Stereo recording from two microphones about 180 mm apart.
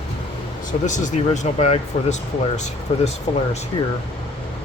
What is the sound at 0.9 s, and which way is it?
Speech, 40° left (ahead or behind).